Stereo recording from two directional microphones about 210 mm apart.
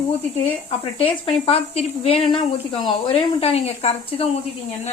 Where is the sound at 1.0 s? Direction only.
25° left (ahead or behind).